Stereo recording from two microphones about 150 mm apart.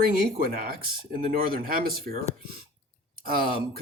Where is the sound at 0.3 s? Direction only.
80° right.